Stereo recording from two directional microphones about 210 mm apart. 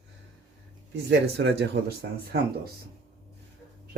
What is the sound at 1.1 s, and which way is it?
Speech, 55° right (ahead or behind).